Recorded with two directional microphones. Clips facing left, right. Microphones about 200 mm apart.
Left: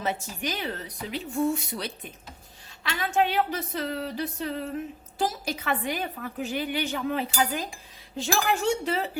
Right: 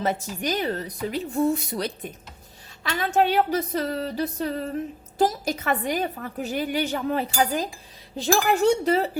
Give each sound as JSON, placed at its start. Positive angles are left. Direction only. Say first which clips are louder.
{"t": 0.0, "sound": "a woman's voice", "louder": "right 4 dB", "side_deg": -40}